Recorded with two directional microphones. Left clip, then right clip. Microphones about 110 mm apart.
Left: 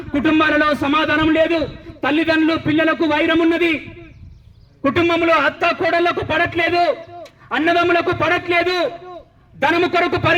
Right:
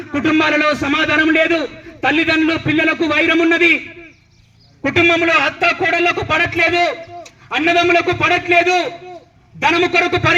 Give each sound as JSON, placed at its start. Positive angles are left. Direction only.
{"t": 0.1, "sound": "a man's voice", "side_deg": 40}
{"t": 4.9, "sound": "a man's voice", "side_deg": 40}